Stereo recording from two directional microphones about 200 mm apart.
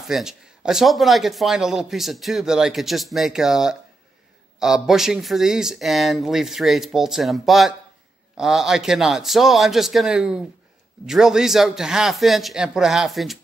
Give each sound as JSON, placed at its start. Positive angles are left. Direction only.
{"t": 0.0, "sound": "speech", "side_deg": 0}